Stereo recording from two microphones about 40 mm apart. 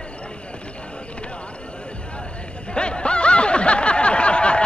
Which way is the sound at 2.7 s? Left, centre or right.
Left.